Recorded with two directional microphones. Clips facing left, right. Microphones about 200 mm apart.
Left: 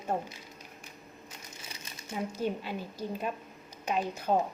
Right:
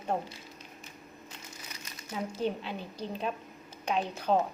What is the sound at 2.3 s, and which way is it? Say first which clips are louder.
A woman's voice: right 1 dB; 10° left (ahead or behind).